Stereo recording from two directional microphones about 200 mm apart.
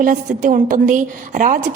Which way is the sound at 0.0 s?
40° right (ahead or behind).